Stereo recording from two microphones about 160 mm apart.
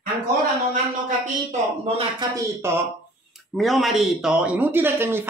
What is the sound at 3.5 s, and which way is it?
Speech, centre (ahead or behind).